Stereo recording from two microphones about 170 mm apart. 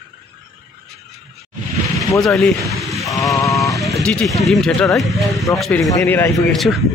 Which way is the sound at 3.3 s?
20° left (ahead or behind).